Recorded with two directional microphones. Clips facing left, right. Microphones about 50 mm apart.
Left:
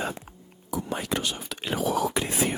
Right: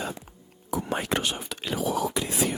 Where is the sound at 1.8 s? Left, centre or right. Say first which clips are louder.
Left 1 dB; left.